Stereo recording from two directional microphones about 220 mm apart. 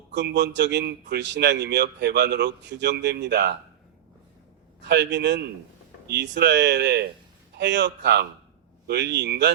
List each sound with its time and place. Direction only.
0.1 s speech: 50° right (ahead or behind)
4.8 s speech: 50° right (ahead or behind)